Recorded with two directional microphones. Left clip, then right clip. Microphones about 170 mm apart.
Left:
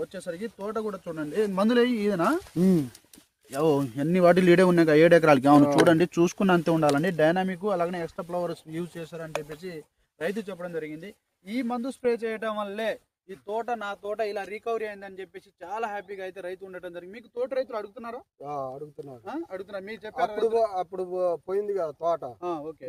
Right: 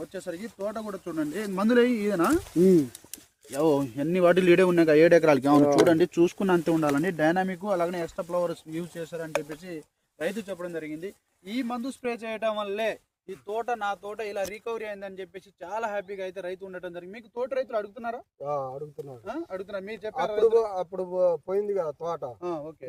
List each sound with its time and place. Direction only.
0.1 s speech: 30° left (ahead or behind); by 2.7 s 60° left (ahead or behind)
3.5 s speech: 70° left (ahead or behind); by 7.3 s 55° left (ahead or behind)
7.3 s speech: 35° left (ahead or behind)